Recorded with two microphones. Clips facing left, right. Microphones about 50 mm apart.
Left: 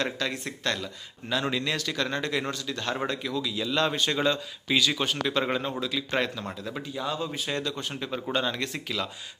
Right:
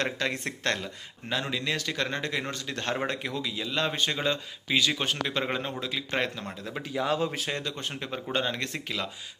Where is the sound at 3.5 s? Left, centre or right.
Centre.